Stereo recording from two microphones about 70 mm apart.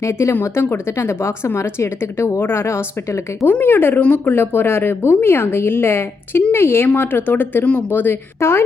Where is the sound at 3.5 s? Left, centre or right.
Left.